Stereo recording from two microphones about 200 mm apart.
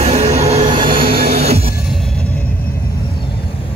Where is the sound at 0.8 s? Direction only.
45° right (ahead or behind).